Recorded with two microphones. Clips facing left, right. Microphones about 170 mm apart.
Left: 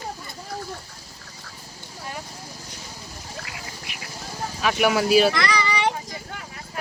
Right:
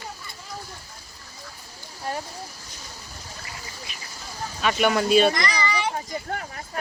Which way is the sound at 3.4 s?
70° left (ahead or behind).